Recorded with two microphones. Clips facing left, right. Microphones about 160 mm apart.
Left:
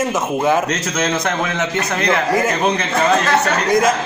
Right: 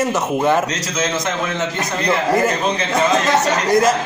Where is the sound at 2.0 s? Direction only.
Centre (ahead or behind).